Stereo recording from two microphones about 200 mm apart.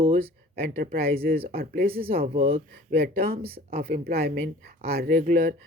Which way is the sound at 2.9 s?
50° right (ahead or behind).